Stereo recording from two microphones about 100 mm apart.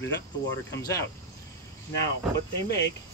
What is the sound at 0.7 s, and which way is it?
Speech, 30° left (ahead or behind).